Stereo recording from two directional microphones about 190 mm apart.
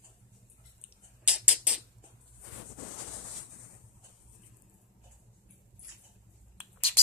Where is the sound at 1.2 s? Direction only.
5° right (ahead or behind).